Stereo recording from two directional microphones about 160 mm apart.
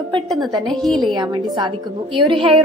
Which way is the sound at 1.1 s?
25° right (ahead or behind).